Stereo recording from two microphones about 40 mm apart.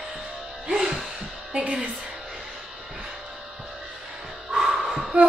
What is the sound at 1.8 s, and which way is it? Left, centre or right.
Speech, right.